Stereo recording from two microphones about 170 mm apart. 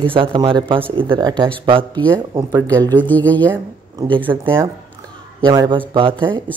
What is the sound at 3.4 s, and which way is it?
Speech, 20° right (ahead or behind).